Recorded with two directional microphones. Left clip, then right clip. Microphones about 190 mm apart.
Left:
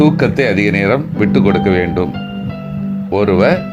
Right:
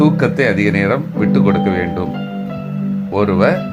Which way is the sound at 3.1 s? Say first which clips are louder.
Left 2 dB; 10° left (ahead or behind).